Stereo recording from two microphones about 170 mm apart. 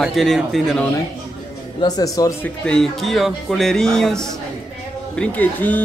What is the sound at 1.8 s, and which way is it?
Speech, 20° left (ahead or behind).